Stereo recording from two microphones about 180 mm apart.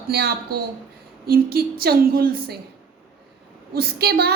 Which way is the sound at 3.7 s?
60° right (ahead or behind).